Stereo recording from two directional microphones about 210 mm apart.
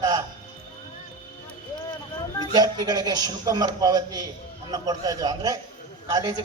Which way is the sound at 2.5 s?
20° right (ahead or behind).